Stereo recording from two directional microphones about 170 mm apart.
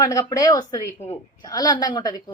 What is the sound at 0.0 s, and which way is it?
Speech, 20° left (ahead or behind).